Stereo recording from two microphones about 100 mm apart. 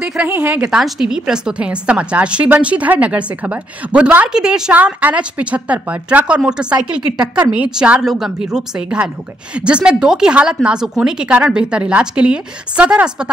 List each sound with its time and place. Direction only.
0.0 s a woman's voice: 10° right (ahead or behind)